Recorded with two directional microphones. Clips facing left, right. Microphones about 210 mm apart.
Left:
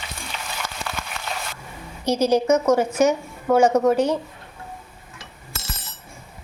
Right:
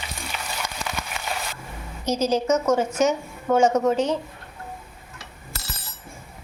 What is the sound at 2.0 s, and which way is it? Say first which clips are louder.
A woman's voice: left 3 dB; 10° left (ahead or behind).